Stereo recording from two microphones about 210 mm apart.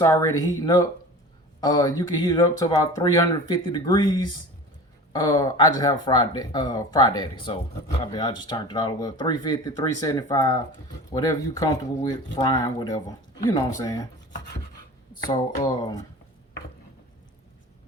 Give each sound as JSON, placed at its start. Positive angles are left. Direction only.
{"t": 0.0, "sound": "speech", "side_deg": 15}